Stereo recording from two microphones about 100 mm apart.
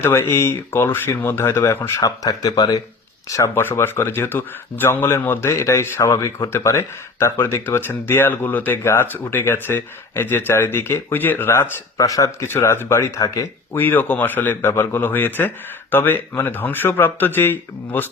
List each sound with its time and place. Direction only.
0.0 s speech: 25° left (ahead or behind)
2.0 s speech: 35° left (ahead or behind)
11.9 s speech: 35° left (ahead or behind)
13.7 s speech: 20° left (ahead or behind)